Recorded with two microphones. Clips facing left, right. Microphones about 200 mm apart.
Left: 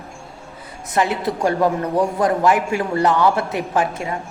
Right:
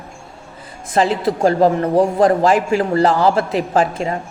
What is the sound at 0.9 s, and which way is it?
A man's voice, 30° right (ahead or behind).